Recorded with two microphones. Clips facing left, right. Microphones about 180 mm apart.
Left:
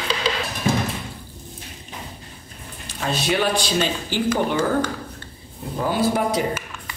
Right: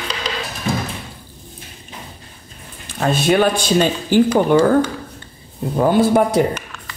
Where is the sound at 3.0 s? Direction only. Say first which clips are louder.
Right 7 dB; 50° right (ahead or behind).